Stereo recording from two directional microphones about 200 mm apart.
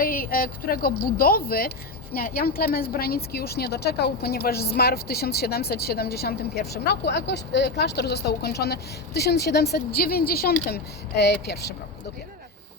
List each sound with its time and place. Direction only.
0.0 s a woman's voice: 45° left (ahead or behind)